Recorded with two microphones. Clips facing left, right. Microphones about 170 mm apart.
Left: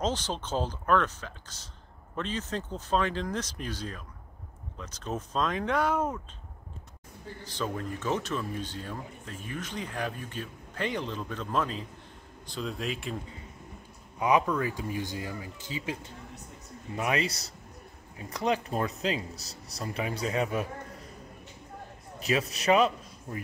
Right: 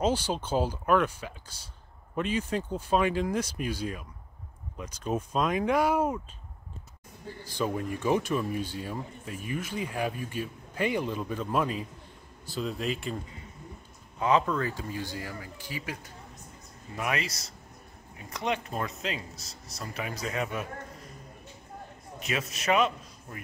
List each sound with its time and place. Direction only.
0.0 s speech: 10° right (ahead or behind)
7.4 s speech: 10° right (ahead or behind)
14.2 s speech: 10° left (ahead or behind); by 20.6 s 30° left (ahead or behind)
22.2 s a man's voice: 35° left (ahead or behind)